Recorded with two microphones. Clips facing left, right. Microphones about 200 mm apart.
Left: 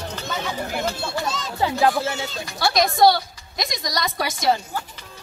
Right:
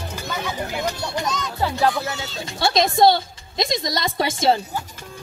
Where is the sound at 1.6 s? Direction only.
20° left (ahead or behind).